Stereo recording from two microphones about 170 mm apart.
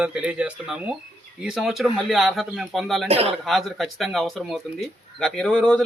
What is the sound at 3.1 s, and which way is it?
Speech, 35° right (ahead or behind).